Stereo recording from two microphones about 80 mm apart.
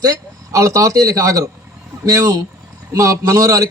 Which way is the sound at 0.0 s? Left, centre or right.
Right.